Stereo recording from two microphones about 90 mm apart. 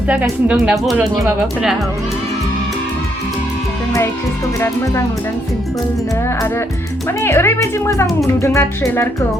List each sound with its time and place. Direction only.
0.1 s speech: 15° right (ahead or behind)
7.2 s speech: 30° left (ahead or behind)